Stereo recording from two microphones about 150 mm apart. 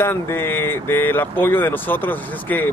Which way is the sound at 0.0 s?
15° left (ahead or behind).